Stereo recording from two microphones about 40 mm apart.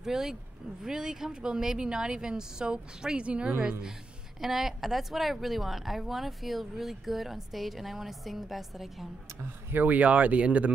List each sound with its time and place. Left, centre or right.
0.0 s a woman's voice: centre; by 3.5 s right
4.4 s a woman's voice: centre
9.4 s speech: right